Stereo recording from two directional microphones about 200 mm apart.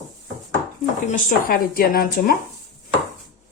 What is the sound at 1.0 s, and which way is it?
Speech, 40° left (ahead or behind).